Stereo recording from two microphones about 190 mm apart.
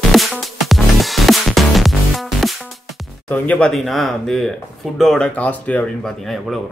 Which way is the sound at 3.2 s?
5° left (ahead or behind).